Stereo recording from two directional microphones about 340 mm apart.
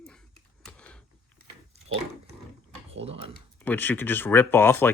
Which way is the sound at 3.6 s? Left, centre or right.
Centre.